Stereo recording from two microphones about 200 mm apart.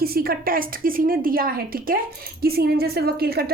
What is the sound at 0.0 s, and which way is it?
Speech, 50° right (ahead or behind).